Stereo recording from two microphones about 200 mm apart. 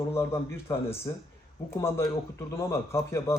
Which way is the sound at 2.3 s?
15° left (ahead or behind).